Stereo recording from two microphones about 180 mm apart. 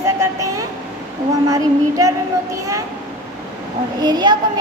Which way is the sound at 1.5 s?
20° right (ahead or behind).